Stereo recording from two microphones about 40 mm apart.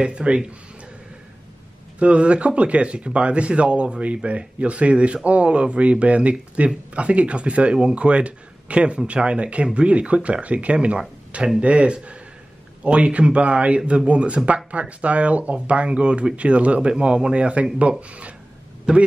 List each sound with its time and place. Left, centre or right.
0.0 s speech: right
2.0 s speech: right